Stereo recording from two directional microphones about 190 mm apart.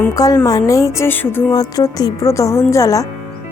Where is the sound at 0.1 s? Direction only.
20° left (ahead or behind).